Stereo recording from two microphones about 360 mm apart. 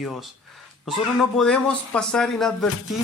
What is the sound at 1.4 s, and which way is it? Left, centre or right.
Speech, centre.